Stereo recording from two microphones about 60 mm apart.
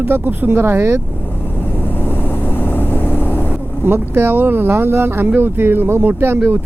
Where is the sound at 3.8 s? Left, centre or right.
Right.